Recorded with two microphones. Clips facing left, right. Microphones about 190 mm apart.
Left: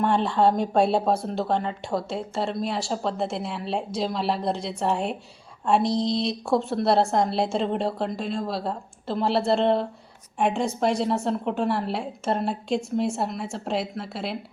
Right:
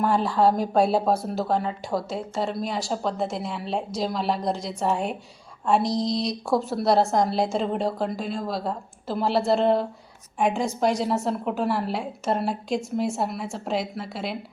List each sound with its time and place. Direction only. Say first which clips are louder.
0.0 s speech: even; 5° right (ahead or behind)
5.8 s a sound: left 1 dB; 30° left (ahead or behind)
6.5 s speech: even; centre (ahead or behind)